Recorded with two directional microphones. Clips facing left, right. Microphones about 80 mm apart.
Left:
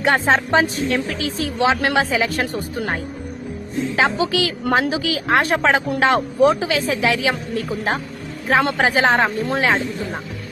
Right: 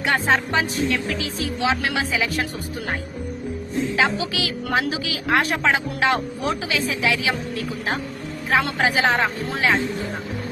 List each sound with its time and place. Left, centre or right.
0.0 s a woman's voice: left